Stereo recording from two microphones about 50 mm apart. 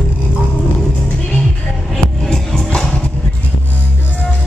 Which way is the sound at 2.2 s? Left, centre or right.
Centre.